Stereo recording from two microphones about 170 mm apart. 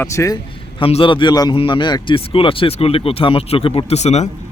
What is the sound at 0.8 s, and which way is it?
A man's voice, 30° left (ahead or behind).